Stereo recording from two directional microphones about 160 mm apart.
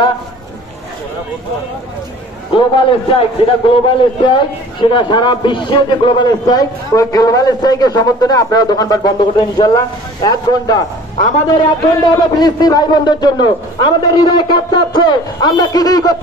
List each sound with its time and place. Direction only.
2.5 s a man's voice: 35° left (ahead or behind)
12.0 s a man's voice: 25° left (ahead or behind)